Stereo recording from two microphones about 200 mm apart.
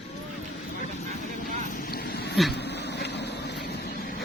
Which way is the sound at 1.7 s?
50° left (ahead or behind).